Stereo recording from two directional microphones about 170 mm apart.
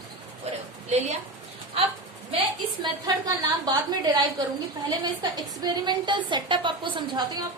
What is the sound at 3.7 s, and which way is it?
A woman's voice, 25° right (ahead or behind).